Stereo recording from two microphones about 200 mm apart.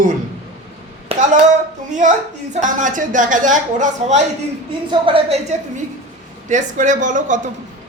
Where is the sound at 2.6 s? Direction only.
40° right (ahead or behind).